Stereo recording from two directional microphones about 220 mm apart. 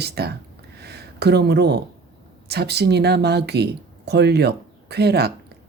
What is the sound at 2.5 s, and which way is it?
Speech, 50° right (ahead or behind).